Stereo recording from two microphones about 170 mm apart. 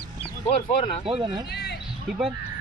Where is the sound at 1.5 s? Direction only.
80° left.